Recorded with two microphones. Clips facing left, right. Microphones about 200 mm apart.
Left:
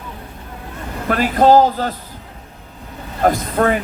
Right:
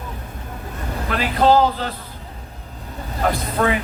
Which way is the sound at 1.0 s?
45° left (ahead or behind).